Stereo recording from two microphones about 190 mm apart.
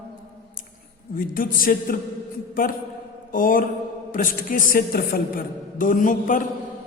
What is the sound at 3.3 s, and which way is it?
A man's voice, 45° left (ahead or behind).